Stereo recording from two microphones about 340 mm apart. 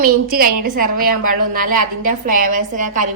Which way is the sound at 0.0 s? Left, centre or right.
Right.